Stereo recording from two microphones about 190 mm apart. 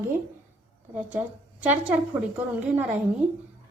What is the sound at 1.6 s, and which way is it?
Speech, 10° right (ahead or behind).